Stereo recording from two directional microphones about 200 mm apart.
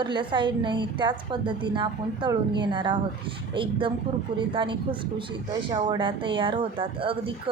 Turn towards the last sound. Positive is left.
turn(degrees=-25)  # may be behind; listen again after turning